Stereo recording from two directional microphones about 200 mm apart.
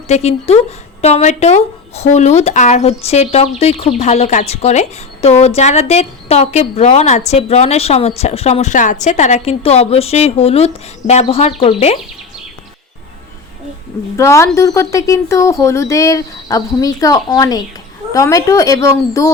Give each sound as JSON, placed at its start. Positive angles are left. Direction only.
{"t": 0.1, "sound": "speech", "side_deg": 30}
{"t": 14.2, "sound": "speech", "side_deg": 15}